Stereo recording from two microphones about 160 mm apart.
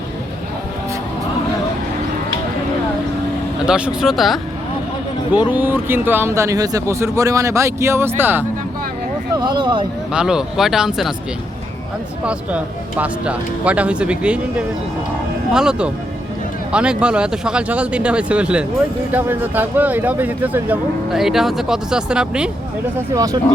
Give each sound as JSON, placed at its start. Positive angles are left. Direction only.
{"t": 3.7, "sound": "speech", "side_deg": -5}
{"t": 5.5, "sound": "speech", "side_deg": -10}
{"t": 9.3, "sound": "speech", "side_deg": -25}
{"t": 10.1, "sound": "speech", "side_deg": -5}
{"t": 12.2, "sound": "speech", "side_deg": -5}
{"t": 23.0, "sound": "speech", "side_deg": -20}